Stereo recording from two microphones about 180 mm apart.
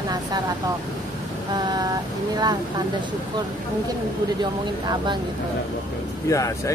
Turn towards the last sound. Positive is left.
turn(degrees=15)  # may be behind; listen again after turning